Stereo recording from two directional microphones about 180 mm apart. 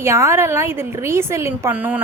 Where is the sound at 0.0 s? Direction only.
15° right (ahead or behind).